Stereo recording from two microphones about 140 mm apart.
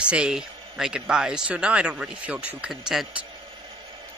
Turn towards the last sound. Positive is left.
turn(degrees=-5)  # may be behind; listen again after turning